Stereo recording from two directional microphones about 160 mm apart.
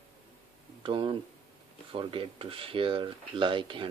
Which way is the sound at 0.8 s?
30° right (ahead or behind).